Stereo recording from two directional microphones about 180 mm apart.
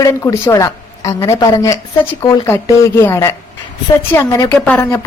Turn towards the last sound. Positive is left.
turn(degrees=15)  # may be behind; listen again after turning